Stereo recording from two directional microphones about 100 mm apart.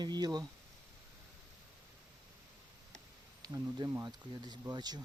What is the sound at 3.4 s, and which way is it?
Speech, 40° right (ahead or behind).